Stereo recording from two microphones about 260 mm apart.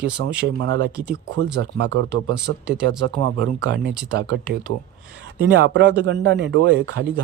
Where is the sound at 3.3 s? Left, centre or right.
Right.